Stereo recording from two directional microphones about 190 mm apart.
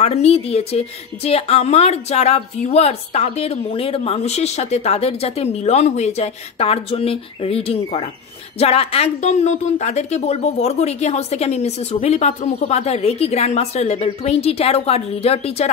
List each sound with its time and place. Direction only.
0.0 s a woman's voice: 35° left (ahead or behind)